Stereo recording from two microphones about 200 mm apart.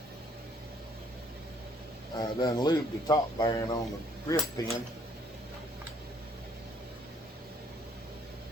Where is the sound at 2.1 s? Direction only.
20° left (ahead or behind).